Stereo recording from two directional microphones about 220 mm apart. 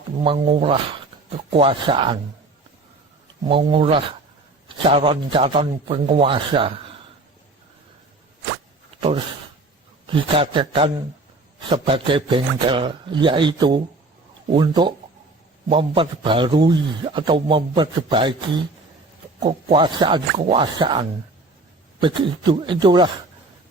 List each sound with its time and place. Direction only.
0.2 s a man's voice: 25° right (ahead or behind)
3.4 s a man's voice: 20° right (ahead or behind)
9.0 s a man's voice: 25° right (ahead or behind)